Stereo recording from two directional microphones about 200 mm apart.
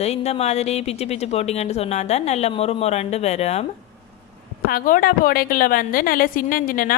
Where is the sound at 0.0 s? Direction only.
30° left (ahead or behind).